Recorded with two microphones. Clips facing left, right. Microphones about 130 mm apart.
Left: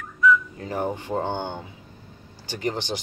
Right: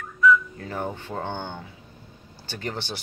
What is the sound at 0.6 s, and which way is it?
Speech, 15° left (ahead or behind).